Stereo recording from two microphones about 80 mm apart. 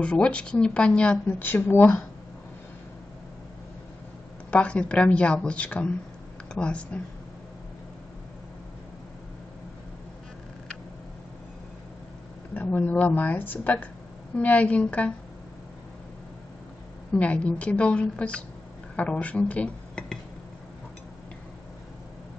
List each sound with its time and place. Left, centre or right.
0.0 s speech: centre
1.4 s speech: left
4.5 s speech: centre
12.5 s speech: left
17.1 s speech: centre